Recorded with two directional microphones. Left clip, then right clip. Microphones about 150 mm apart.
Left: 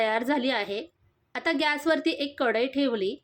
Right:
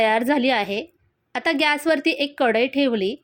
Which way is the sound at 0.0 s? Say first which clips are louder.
Right 7 dB; 25° right (ahead or behind).